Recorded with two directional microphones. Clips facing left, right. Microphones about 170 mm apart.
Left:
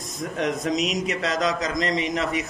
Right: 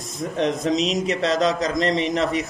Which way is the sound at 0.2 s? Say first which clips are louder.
Right 3 dB; 30° right (ahead or behind).